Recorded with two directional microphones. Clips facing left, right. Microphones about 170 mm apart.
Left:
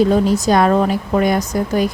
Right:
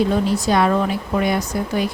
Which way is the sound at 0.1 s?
45° left (ahead or behind).